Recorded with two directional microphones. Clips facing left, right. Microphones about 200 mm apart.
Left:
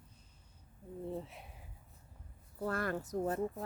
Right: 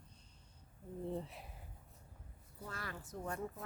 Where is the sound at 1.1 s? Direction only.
Centre (ahead or behind).